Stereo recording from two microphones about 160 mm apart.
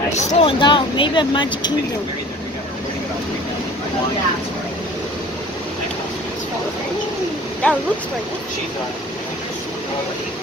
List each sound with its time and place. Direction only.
0.3 s speech: 35° left (ahead or behind)
7.6 s speech: 5° left (ahead or behind)